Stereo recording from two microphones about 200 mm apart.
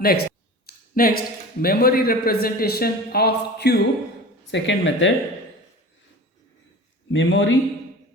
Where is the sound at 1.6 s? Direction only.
45° left (ahead or behind).